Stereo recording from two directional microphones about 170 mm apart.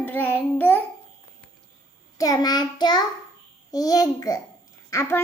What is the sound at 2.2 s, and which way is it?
Child singing, 20° left (ahead or behind).